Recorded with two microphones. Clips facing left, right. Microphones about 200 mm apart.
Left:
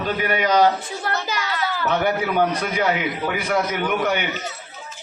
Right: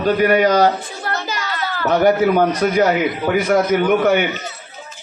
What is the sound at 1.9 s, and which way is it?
A man's voice, 45° right (ahead or behind).